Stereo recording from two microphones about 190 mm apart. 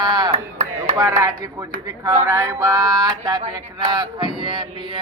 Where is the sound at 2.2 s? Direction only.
15° right (ahead or behind).